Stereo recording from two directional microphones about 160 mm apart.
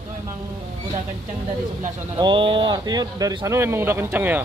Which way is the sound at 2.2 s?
30° right (ahead or behind).